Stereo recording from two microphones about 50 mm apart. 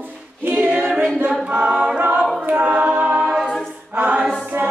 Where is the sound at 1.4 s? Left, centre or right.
Right.